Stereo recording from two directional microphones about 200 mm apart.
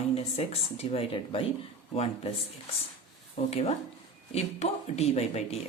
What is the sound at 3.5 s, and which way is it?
Speech, 30° left (ahead or behind).